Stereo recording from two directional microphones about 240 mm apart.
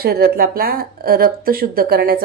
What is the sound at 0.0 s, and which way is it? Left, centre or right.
Speech, right.